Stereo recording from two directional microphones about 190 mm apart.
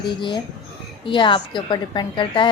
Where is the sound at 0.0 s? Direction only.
25° left (ahead or behind).